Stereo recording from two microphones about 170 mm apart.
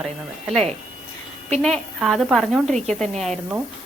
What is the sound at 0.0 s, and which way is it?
Speech, centre (ahead or behind).